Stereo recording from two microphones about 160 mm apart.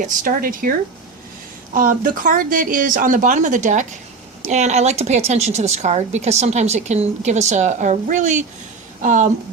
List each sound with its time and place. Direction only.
0.1 s a woman's voice: 60° right (ahead or behind)